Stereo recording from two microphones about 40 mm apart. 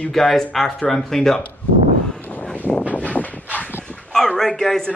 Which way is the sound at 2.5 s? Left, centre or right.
Left.